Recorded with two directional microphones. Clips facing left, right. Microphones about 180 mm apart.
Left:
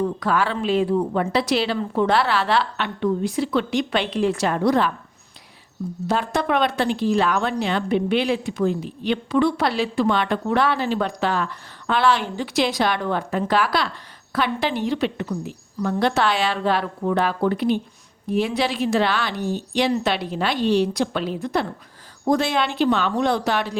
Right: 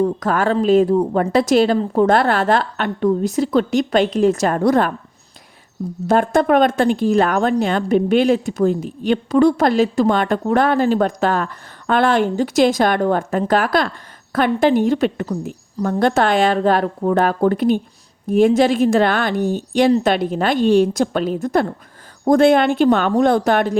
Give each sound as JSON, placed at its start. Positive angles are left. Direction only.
{"t": 0.0, "sound": "speech", "side_deg": -45}
{"t": 6.1, "sound": "speech", "side_deg": -50}